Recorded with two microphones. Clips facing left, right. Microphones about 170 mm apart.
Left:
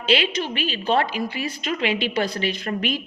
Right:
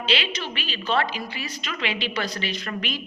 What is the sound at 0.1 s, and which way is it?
A woman's voice, 50° left (ahead or behind).